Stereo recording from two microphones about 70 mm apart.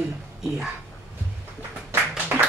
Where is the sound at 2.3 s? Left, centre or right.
Right.